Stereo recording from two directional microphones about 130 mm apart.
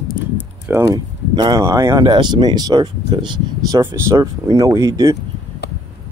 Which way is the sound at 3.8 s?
20° right (ahead or behind).